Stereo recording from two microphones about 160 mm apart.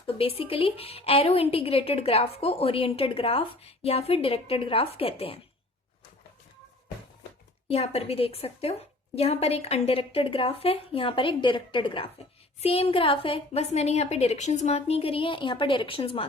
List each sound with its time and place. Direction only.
0.2 s a woman's voice: 35° left (ahead or behind)
7.7 s a woman's voice: 40° left (ahead or behind)